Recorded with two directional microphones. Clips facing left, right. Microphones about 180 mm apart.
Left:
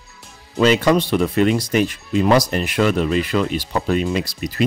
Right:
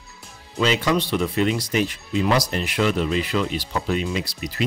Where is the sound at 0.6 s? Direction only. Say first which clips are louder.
Left 6 dB; 50° left (ahead or behind).